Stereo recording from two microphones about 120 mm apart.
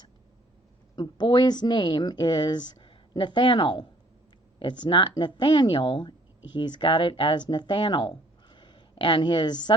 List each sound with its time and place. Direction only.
0.9 s a woman's voice: 40° left (ahead or behind)